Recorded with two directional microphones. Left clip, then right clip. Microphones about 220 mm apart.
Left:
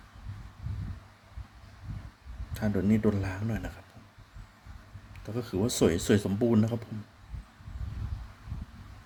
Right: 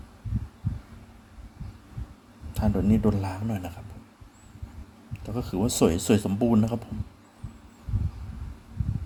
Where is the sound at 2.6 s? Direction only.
Centre (ahead or behind).